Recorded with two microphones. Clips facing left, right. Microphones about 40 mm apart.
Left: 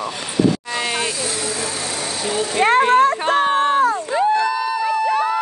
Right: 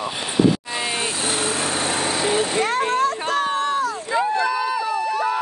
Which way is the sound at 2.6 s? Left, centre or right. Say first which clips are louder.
Left 7 dB; left.